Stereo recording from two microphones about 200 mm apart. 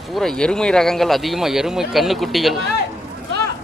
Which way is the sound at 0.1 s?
5° left (ahead or behind).